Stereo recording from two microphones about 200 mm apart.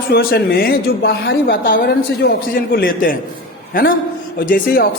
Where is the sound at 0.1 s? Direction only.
50° left (ahead or behind).